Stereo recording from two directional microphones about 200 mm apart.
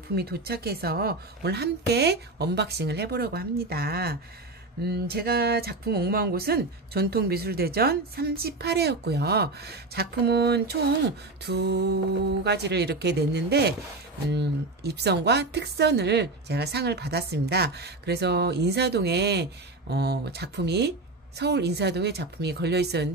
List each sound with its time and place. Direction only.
0.1 s speech: 50° right (ahead or behind)